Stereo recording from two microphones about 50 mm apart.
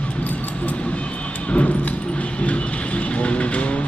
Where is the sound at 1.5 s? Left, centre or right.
Left.